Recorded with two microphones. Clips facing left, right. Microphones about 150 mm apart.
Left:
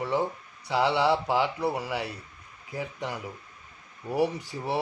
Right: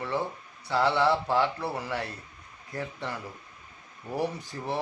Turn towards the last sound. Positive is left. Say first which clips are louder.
# left 2 dB
turn(degrees=10)  # may be behind; listen again after turning